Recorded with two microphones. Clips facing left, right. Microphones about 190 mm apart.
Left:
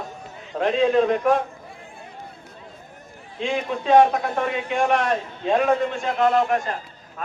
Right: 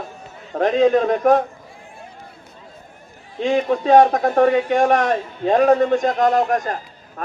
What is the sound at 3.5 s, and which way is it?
A man's voice, 40° right (ahead or behind).